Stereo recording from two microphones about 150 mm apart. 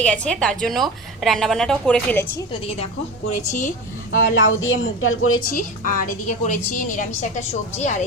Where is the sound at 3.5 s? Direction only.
55° left (ahead or behind).